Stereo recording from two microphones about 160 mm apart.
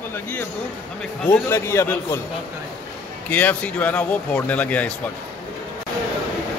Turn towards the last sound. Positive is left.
turn(degrees=10)  # may be behind; listen again after turning